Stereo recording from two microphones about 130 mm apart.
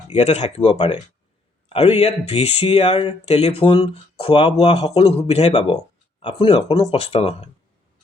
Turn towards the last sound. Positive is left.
turn(degrees=50)  # may be behind; listen again after turning